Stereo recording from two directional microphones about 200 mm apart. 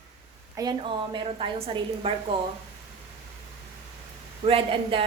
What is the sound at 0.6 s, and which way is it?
A woman's voice, 20° right (ahead or behind).